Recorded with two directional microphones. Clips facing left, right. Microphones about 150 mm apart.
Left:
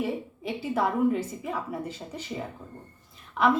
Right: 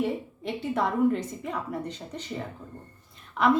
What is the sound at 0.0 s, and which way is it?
A woman's voice, centre (ahead or behind).